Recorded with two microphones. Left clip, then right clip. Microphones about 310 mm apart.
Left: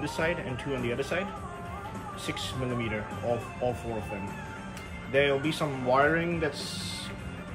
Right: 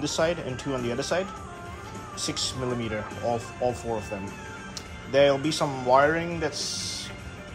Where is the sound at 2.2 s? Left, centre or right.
Centre.